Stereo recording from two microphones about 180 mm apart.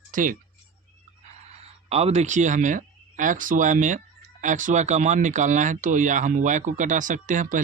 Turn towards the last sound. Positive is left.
turn(degrees=-45)  # may be behind; listen again after turning